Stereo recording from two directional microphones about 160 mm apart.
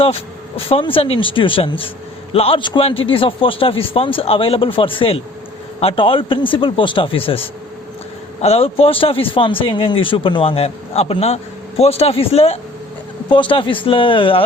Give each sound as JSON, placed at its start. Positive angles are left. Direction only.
{"t": 0.0, "sound": "speech", "side_deg": 35}